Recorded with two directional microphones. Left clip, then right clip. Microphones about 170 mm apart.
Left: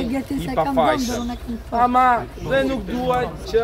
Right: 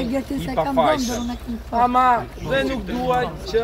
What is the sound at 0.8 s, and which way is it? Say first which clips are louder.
Speech: right 1 dB; 20° left (ahead or behind).